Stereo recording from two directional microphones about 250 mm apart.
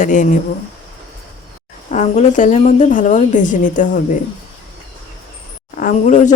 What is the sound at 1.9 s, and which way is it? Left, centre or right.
A woman's voice, left.